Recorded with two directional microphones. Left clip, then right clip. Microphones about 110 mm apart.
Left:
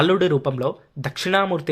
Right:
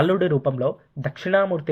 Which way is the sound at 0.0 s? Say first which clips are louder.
Left 2 dB; 25° left (ahead or behind).